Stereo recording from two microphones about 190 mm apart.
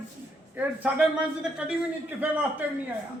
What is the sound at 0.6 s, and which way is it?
Speech, 5° right (ahead or behind).